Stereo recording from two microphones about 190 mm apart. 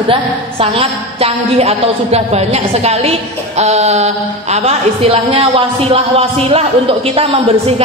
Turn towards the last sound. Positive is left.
turn(degrees=-30)  # may be behind; listen again after turning